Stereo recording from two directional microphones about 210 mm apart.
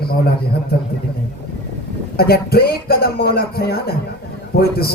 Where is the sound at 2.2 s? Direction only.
45° left (ahead or behind).